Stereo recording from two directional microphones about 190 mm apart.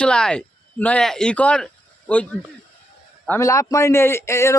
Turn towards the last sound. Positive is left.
turn(degrees=15)  # may be behind; listen again after turning